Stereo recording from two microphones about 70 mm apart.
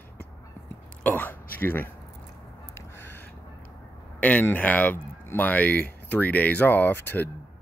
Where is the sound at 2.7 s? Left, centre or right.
Left.